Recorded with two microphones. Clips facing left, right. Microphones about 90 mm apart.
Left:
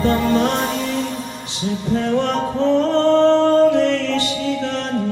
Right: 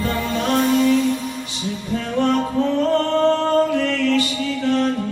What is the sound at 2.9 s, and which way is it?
Music, 30° left (ahead or behind).